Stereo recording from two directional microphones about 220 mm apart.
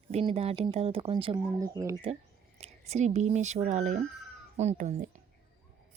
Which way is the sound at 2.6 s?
30° right (ahead or behind).